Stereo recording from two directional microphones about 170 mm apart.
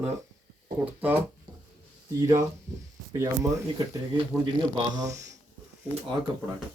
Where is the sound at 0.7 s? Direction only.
10° right (ahead or behind).